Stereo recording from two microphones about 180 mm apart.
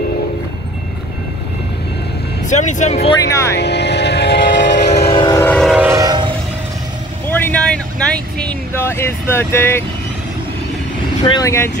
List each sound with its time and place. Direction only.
2.4 s speech: 45° left (ahead or behind)
3.5 s vehicle: 70° left (ahead or behind)
5.1 s train: 25° left (ahead or behind)
5.4 s train: 10° left (ahead or behind)
5.7 s train: 10° right (ahead or behind)
5.9 s train: 25° right (ahead or behind)
7.2 s vehicle: 10° left (ahead or behind)
11.2 s speech: 20° left (ahead or behind)